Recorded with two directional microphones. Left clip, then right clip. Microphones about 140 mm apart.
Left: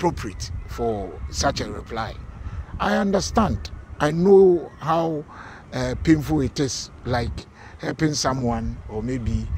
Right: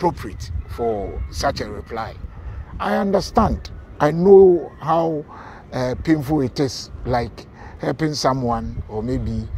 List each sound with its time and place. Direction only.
0.0 s speech: 25° left (ahead or behind)